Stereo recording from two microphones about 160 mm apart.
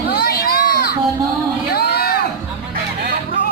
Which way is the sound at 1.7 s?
80° left.